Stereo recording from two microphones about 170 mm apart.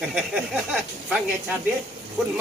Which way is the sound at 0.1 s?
5° right (ahead or behind).